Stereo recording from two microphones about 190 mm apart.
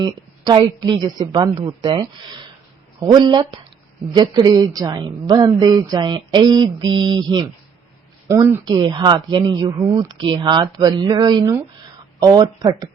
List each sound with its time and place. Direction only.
0.0 s a woman's voice: 20° right (ahead or behind)